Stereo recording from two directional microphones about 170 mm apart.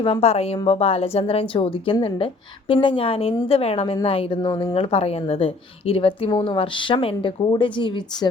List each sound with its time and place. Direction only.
0.0 s a woman's voice: 35° left (ahead or behind)